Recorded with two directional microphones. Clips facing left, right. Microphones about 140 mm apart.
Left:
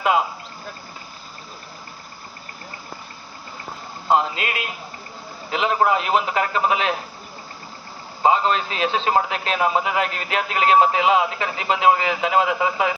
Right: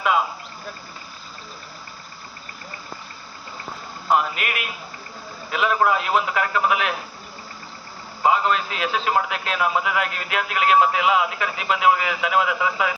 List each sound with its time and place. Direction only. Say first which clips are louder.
4.1 s a man's voice: left 1 dB; 25° left (ahead or behind)
8.2 s a man's voice: left 1 dB; 30° left (ahead or behind)